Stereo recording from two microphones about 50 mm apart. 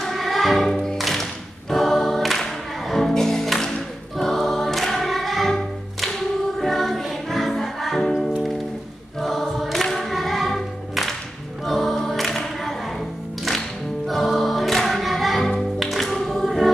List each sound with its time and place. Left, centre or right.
0.0 s music: centre
1.7 s choir: centre
2.9 s music: centre
9.2 s choir: centre